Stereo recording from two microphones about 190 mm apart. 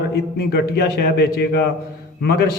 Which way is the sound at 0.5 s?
55° left (ahead or behind).